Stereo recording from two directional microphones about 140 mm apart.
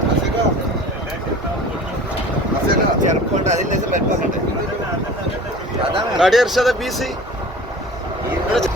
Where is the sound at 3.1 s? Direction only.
60° right (ahead or behind).